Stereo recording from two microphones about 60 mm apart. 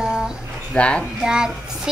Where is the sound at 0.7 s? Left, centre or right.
Centre.